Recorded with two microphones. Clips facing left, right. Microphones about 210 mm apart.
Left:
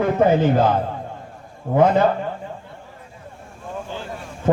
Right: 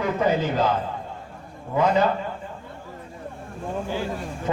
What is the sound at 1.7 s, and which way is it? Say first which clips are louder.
Speech: left 5 dB; 55° left (ahead or behind).